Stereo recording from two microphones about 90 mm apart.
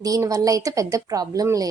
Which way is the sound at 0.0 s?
40° right (ahead or behind).